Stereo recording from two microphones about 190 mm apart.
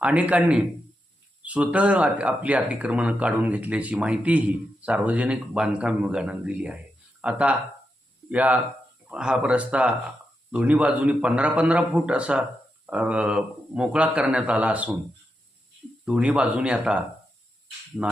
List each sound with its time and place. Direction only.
0.0 s speech: 5° right (ahead or behind)
16.0 s speech: 5° right (ahead or behind)